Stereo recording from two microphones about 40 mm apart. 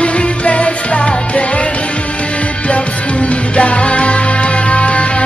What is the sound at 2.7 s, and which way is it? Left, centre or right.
Music, left.